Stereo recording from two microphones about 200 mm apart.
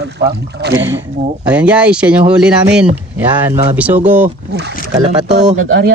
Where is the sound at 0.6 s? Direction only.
60° right (ahead or behind).